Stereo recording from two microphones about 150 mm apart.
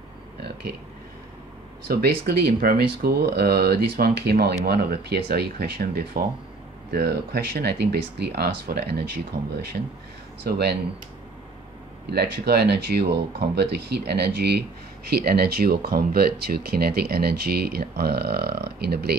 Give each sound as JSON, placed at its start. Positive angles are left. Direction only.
{"t": 1.9, "sound": "speech", "side_deg": -90}
{"t": 12.1, "sound": "speech", "side_deg": -90}